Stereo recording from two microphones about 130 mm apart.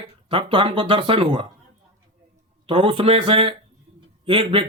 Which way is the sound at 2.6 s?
40° right (ahead or behind).